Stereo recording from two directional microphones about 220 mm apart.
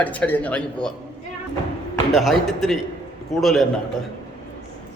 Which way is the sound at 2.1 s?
Centre (ahead or behind).